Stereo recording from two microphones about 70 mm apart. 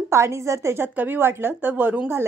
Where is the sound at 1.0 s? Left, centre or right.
Right.